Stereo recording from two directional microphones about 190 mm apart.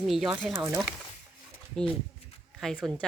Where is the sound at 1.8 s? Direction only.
Centre (ahead or behind).